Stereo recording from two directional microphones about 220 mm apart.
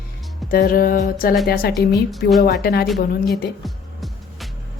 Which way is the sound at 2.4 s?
45° left (ahead or behind).